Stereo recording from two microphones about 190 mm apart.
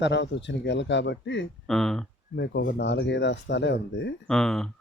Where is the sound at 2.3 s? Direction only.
65° left (ahead or behind).